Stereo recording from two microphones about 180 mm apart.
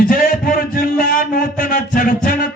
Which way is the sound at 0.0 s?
50° left (ahead or behind).